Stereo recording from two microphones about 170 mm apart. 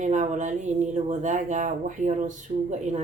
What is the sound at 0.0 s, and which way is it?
Speech, 45° right (ahead or behind).